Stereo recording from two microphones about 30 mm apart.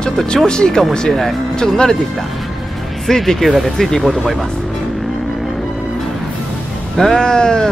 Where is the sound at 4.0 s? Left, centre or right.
Centre.